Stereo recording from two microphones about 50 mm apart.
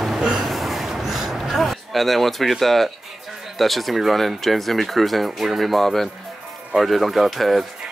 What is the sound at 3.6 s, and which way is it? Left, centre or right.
Speech, centre.